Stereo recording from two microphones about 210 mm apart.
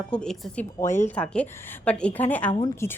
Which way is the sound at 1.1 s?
5° left (ahead or behind).